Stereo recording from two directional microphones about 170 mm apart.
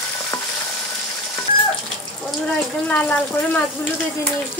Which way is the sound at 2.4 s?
5° left (ahead or behind).